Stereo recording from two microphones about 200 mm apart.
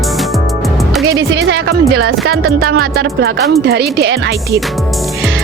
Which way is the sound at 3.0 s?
55° right (ahead or behind).